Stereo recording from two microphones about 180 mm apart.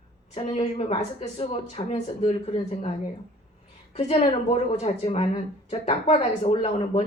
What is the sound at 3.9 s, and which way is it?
Speech, 35° left (ahead or behind).